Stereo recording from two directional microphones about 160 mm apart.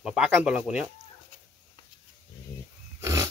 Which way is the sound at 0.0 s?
5° right (ahead or behind).